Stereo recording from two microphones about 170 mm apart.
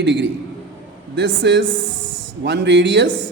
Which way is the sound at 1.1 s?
90° right.